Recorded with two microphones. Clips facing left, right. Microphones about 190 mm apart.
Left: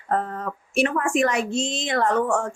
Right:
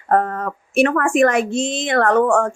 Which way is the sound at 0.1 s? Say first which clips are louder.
Right 7 dB; 60° right (ahead or behind).